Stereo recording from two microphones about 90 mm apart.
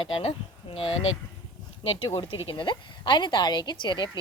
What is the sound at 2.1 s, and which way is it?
Speech, 65° left (ahead or behind).